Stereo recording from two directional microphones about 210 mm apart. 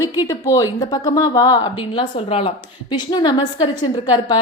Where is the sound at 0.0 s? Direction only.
15° left (ahead or behind).